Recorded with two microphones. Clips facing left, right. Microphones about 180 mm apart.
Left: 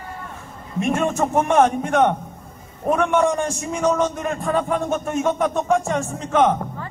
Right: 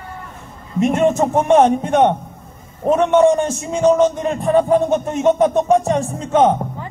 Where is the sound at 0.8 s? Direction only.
20° right (ahead or behind).